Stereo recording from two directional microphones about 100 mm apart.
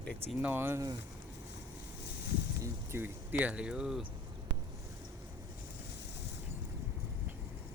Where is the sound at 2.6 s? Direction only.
20° right (ahead or behind); by 4.0 s 5° right (ahead or behind).